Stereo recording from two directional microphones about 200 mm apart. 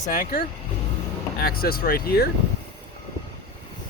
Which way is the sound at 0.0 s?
40° left (ahead or behind).